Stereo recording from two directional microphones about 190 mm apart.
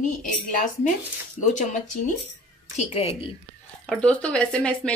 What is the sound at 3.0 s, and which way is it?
Speech, 30° left (ahead or behind).